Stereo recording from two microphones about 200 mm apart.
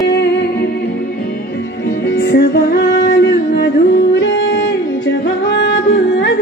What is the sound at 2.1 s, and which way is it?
Music, 60° left (ahead or behind).